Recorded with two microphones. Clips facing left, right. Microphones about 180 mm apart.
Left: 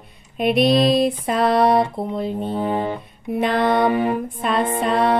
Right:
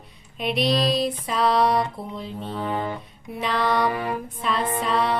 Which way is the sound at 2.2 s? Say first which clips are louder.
Left 10 dB; 55° left (ahead or behind).